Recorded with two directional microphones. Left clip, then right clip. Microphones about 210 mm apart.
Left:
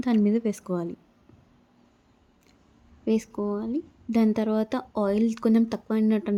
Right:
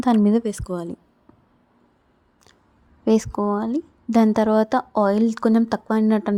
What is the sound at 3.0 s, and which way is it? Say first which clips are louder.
A woman's voice: right 7 dB; 25° right (ahead or behind).